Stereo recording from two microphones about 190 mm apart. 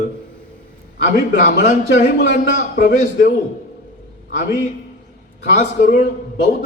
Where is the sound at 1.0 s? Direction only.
45° left (ahead or behind).